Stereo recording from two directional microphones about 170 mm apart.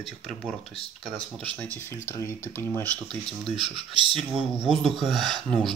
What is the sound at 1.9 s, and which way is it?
Speech, 15° left (ahead or behind).